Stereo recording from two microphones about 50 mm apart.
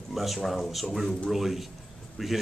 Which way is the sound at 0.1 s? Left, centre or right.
Centre.